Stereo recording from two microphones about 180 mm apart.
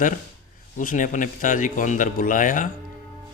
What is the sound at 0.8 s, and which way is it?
Speech, 45° left (ahead or behind).